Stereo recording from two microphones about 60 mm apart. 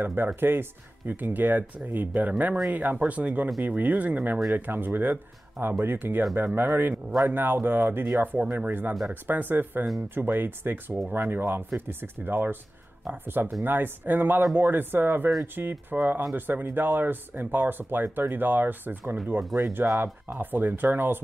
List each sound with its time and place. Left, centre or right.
0.0 s speech: right